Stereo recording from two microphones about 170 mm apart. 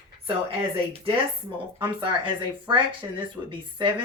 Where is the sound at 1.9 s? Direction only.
30° right (ahead or behind).